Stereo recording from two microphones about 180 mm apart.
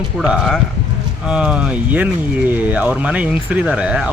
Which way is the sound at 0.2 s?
Centre (ahead or behind).